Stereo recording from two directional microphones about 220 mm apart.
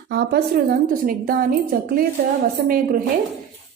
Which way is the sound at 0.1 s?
45° right (ahead or behind).